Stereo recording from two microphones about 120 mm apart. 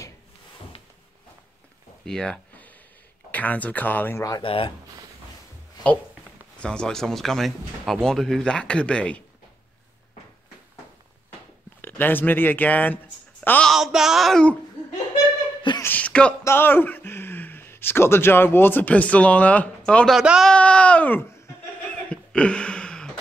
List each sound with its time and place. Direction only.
2.0 s a sound: 5° left (ahead or behind)
3.3 s speech: 15° left (ahead or behind)
4.4 s speech: 50° left (ahead or behind)
6.6 s speech: 5° left (ahead or behind)
11.8 s speech: 15° left (ahead or behind)
13.7 s speech: 5° right (ahead or behind)
15.8 s a sound: 15° left (ahead or behind)
16.4 s speech: 20° left (ahead or behind)
20.2 s speech: 5° right (ahead or behind)
20.5 s a sound: 10° left (ahead or behind)